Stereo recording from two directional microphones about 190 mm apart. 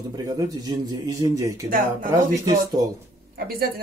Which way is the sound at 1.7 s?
45° right (ahead or behind).